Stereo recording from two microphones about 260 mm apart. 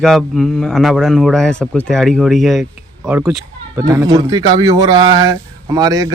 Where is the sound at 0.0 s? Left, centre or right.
Centre.